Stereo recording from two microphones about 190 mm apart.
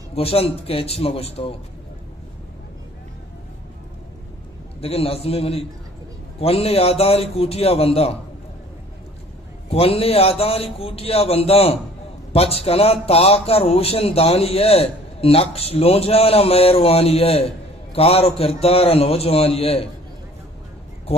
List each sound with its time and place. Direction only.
0.1 s a man's voice: 30° left (ahead or behind)
4.7 s a man's voice: 30° left (ahead or behind)
9.7 s a man's voice: 30° left (ahead or behind)
21.1 s a sound: 30° left (ahead or behind)